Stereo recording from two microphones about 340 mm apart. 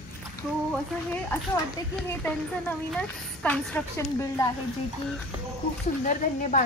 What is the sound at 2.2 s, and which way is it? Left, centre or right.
A woman's voice, centre.